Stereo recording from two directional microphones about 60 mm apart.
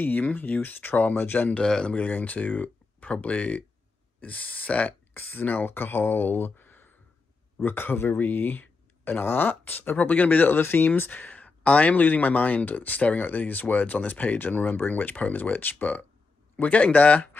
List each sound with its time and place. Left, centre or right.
0.0 s speech: left
1.5 s speech: centre